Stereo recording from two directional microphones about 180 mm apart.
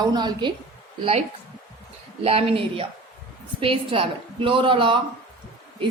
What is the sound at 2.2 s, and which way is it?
A woman's voice, 35° right (ahead or behind).